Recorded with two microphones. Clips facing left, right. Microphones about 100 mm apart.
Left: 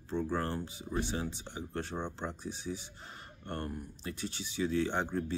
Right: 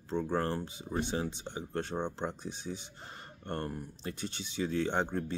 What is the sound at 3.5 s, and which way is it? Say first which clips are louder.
Speech: right 2 dB; 45° right (ahead or behind).